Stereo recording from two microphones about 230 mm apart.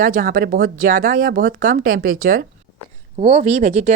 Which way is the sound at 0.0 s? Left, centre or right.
Right.